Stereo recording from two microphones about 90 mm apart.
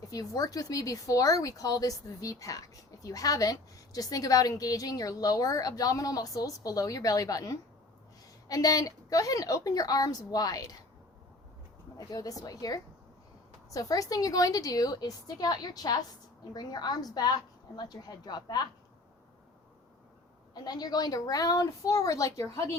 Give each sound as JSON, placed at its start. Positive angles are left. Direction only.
{"t": 0.1, "sound": "a woman's voice", "side_deg": 40}
{"t": 11.9, "sound": "a woman's voice", "side_deg": 45}
{"t": 20.5, "sound": "a woman's voice", "side_deg": 45}